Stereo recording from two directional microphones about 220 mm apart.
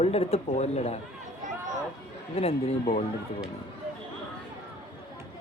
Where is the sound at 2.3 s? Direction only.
25° left (ahead or behind).